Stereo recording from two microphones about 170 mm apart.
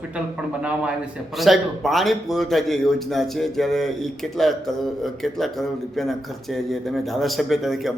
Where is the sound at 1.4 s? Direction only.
Centre (ahead or behind).